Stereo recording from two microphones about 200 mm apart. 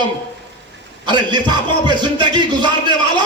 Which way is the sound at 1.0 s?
20° right (ahead or behind).